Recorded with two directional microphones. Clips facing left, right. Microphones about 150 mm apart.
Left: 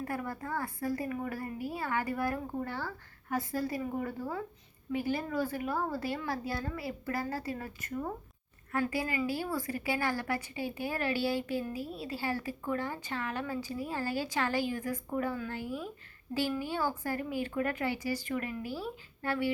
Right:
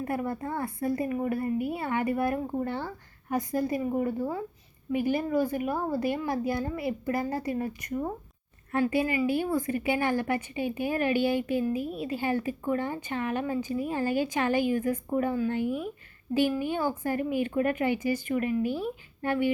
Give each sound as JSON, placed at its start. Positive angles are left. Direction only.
{"t": 0.0, "sound": "a woman's voice", "side_deg": -25}